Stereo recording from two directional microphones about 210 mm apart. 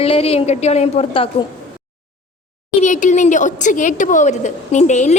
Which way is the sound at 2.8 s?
35° left (ahead or behind).